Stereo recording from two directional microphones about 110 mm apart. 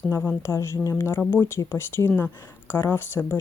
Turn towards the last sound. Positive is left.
turn(degrees=20)  # may be behind; listen again after turning